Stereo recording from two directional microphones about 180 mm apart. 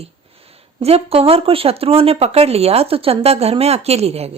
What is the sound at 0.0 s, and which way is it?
Speech, 35° right (ahead or behind).